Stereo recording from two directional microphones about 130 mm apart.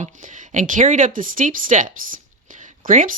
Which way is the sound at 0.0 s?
75° right (ahead or behind).